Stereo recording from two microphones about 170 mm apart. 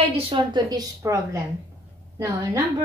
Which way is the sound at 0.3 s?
25° right (ahead or behind).